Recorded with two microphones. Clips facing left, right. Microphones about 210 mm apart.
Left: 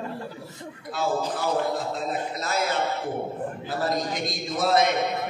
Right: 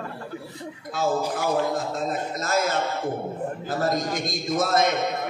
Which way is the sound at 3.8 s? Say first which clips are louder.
Right 1 dB; 45° right (ahead or behind).